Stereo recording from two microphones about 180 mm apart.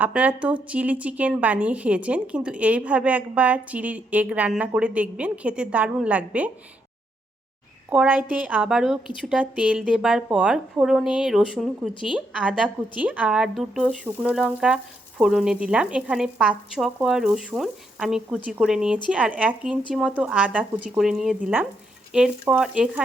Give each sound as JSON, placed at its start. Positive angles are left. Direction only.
{"t": 0.0, "sound": "a woman's voice", "side_deg": -5}
{"t": 7.9, "sound": "a woman's voice", "side_deg": -10}